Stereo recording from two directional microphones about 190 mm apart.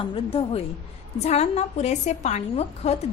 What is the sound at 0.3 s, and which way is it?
A woman's voice, 30° left (ahead or behind).